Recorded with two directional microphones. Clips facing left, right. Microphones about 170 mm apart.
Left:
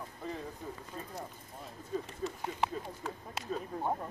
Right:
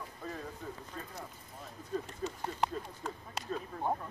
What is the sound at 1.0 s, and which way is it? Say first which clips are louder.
Speech: left 2 dB; 10° left (ahead or behind).